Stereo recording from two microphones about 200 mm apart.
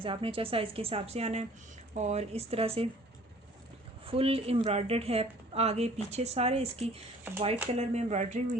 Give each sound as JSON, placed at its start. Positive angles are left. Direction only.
{"t": 0.0, "sound": "a woman's voice", "side_deg": -25}
{"t": 4.0, "sound": "a woman's voice", "side_deg": -30}